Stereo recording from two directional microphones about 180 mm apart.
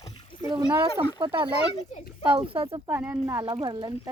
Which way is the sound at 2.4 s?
30° right (ahead or behind).